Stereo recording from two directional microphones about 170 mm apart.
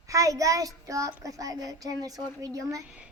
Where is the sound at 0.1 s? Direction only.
20° right (ahead or behind).